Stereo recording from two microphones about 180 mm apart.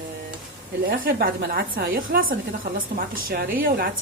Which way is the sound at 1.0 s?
55° right (ahead or behind).